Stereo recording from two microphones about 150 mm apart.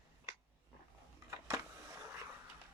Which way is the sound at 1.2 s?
15° right (ahead or behind).